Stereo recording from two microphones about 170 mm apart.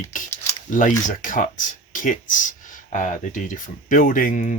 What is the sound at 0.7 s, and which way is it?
Speech, 50° left (ahead or behind).